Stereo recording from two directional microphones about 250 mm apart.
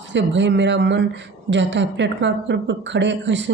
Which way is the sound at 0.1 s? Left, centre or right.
Right.